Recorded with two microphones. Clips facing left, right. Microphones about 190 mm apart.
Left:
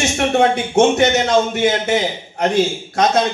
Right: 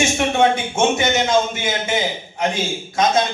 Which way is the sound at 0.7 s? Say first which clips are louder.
Left 5 dB; 65° left (ahead or behind).